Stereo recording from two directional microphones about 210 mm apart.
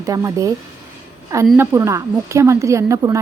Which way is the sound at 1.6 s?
15° right (ahead or behind).